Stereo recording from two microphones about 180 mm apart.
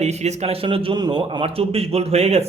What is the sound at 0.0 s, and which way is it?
A man's voice, 40° right (ahead or behind).